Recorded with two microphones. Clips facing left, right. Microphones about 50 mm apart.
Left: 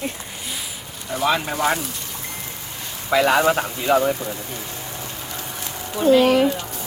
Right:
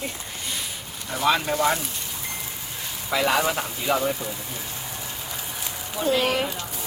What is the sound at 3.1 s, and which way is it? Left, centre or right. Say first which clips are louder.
Speech: left 6 dB; left.